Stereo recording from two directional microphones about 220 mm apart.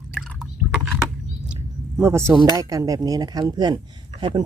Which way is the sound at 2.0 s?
10° right (ahead or behind).